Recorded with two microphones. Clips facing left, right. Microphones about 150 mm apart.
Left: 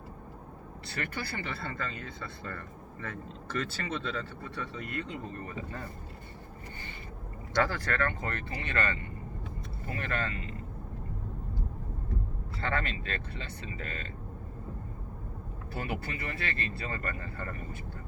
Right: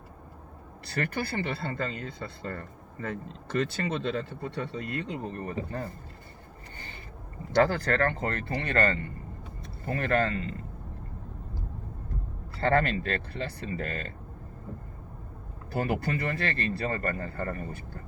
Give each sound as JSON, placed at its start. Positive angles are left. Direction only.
{"t": 1.4, "sound": "speech", "side_deg": -25}
{"t": 5.5, "sound": "speech", "side_deg": -35}
{"t": 7.5, "sound": "speech", "side_deg": -30}
{"t": 12.5, "sound": "speech", "side_deg": -35}
{"t": 15.7, "sound": "speech", "side_deg": -40}